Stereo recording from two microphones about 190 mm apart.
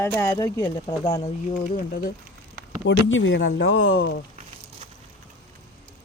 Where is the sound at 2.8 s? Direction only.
90° left.